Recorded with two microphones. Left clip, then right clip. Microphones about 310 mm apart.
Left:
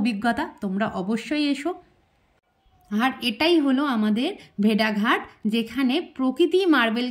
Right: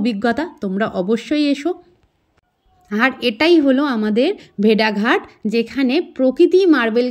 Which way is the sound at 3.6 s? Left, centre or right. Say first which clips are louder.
Right 6 dB; centre.